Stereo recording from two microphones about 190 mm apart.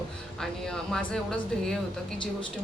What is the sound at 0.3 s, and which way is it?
Speech, centre (ahead or behind).